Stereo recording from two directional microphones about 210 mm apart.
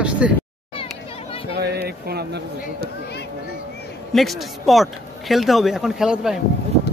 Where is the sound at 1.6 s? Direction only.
50° right (ahead or behind).